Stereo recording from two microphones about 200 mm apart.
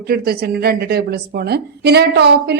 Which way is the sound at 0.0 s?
50° right (ahead or behind).